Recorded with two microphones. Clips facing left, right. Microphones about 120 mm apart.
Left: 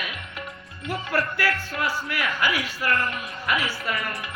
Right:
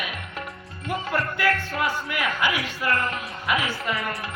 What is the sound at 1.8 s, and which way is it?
A man's voice, 20° right (ahead or behind).